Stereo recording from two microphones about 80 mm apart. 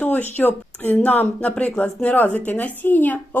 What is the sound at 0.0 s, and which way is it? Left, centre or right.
Speech, left.